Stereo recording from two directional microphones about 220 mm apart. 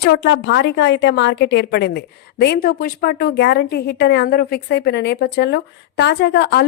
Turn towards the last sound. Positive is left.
turn(degrees=50)  # may be behind; listen again after turning